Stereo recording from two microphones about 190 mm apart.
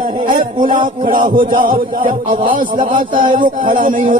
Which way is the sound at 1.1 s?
45° right (ahead or behind).